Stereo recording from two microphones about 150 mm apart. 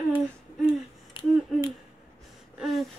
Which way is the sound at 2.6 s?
Centre (ahead or behind).